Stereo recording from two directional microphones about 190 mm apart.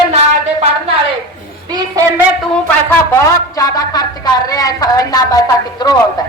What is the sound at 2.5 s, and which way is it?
Speech, 10° left (ahead or behind).